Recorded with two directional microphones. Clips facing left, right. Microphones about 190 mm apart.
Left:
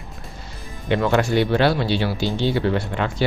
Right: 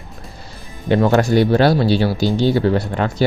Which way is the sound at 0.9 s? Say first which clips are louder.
Right 5 dB; 40° right (ahead or behind).